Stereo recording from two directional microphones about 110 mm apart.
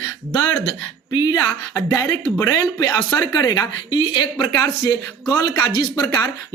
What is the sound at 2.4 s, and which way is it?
Speech, 25° left (ahead or behind).